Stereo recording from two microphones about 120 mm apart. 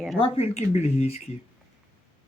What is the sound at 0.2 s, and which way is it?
Speech, 55° left (ahead or behind).